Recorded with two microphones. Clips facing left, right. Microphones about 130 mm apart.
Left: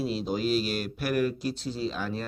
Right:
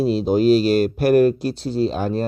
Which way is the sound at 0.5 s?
70° right (ahead or behind).